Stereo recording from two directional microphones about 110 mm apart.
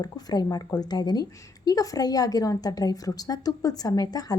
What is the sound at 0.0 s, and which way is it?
A woman's voice, 35° left (ahead or behind).